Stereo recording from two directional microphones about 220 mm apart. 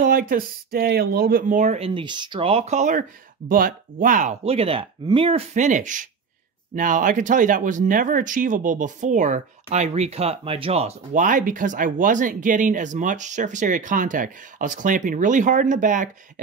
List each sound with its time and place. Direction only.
0.0 s speech: 40° right (ahead or behind)